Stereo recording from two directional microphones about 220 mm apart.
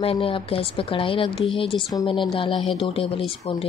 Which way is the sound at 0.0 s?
25° left (ahead or behind).